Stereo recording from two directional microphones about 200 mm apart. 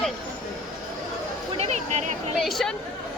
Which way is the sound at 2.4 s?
Centre (ahead or behind).